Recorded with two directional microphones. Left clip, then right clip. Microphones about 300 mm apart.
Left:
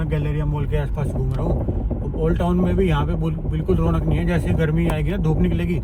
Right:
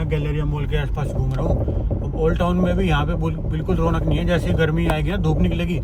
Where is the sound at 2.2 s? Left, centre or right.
Right.